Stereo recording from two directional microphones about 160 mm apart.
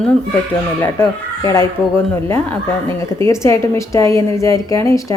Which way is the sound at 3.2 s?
20° left (ahead or behind).